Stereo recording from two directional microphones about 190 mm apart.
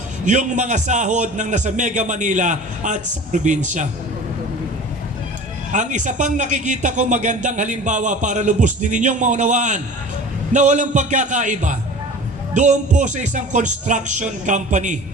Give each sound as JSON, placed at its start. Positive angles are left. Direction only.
{"t": 0.3, "sound": "a man's voice", "side_deg": -40}
{"t": 5.7, "sound": "a man's voice", "side_deg": -40}